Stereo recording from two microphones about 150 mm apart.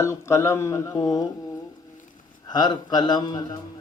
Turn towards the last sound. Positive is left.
turn(degrees=25)  # may be behind; listen again after turning